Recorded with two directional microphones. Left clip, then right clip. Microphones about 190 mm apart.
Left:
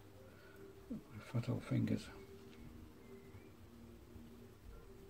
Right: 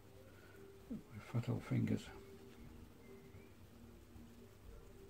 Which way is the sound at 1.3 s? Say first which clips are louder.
Left 1 dB; 30° right (ahead or behind).